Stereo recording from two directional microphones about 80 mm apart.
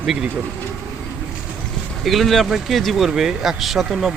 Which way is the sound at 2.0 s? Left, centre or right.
Centre.